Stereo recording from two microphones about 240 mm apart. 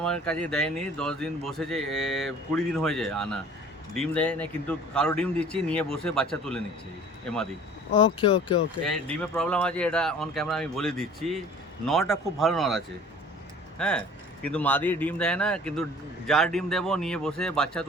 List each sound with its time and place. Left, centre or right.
0.0 s a man's voice: centre
7.9 s speech: centre
8.9 s a man's voice: centre